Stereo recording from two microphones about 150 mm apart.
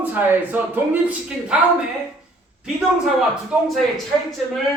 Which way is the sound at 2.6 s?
5° right (ahead or behind).